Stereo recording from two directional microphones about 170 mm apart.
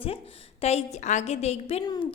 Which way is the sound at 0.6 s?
40° left (ahead or behind).